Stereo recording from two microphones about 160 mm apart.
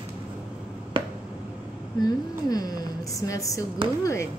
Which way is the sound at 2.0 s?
25° left (ahead or behind).